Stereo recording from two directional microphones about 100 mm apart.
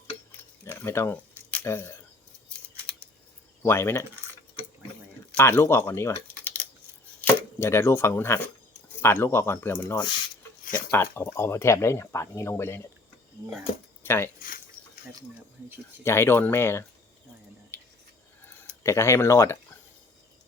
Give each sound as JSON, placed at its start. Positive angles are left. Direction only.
{"t": 0.3, "sound": "keys jangling", "side_deg": 20}
{"t": 1.6, "sound": "speech", "side_deg": 25}
{"t": 2.5, "sound": "scissors", "side_deg": 10}
{"t": 3.6, "sound": "speech", "side_deg": 25}
{"t": 5.4, "sound": "speech", "side_deg": 25}
{"t": 7.2, "sound": "chopping", "side_deg": 25}
{"t": 9.0, "sound": "speech", "side_deg": 25}
{"t": 14.0, "sound": "speech", "side_deg": 25}
{"t": 16.0, "sound": "speech", "side_deg": 25}
{"t": 17.7, "sound": "a sound", "side_deg": 25}
{"t": 18.4, "sound": "speech", "side_deg": 25}